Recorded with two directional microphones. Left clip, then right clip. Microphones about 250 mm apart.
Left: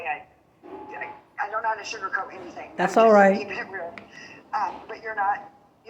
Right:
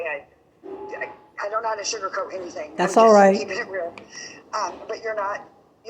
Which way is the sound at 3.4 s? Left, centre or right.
Centre.